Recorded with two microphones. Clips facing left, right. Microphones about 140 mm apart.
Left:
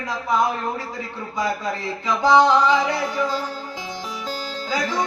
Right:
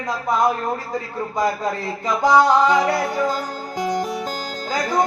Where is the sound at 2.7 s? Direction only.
45° right (ahead or behind).